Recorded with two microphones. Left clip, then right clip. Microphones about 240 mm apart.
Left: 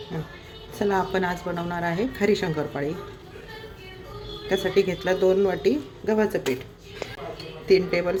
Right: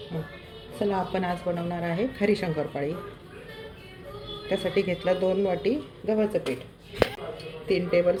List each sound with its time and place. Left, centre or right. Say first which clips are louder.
0.9 s speech: left 4 dB; left
2.0 s speech: left 2 dB; left
2.6 s speech: left 1 dB; left
4.4 s speech: left 4 dB; left
6.1 s speech: left 2 dB; left
7.8 s speech: right 1 dB; left